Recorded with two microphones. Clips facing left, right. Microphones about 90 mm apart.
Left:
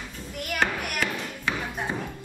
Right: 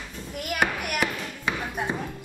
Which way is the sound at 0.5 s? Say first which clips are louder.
Right 1 dB; 15° right (ahead or behind).